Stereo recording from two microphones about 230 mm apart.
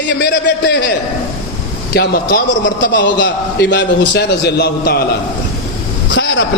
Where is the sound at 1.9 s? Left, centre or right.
Left.